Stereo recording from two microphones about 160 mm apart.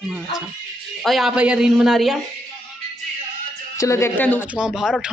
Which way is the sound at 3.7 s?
20° left (ahead or behind).